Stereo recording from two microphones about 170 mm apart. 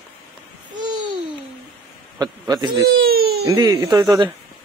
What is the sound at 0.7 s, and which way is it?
Babbling, 25° right (ahead or behind).